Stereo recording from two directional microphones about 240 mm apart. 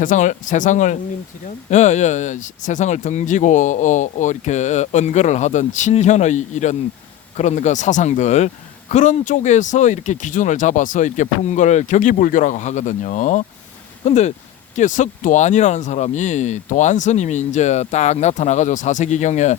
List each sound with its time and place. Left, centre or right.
0.0 s speech: left